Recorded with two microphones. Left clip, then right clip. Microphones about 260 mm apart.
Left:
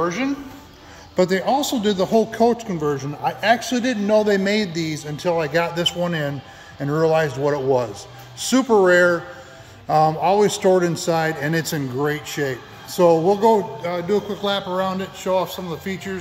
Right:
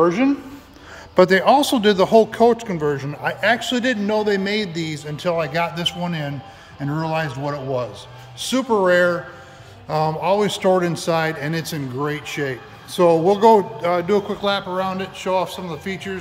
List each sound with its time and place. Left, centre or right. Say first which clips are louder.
0.0 s a woman's voice: right 5 dB; right
1.1 s a man's voice: right 5 dB; centre
14.1 s a man's voice: right 2 dB; centre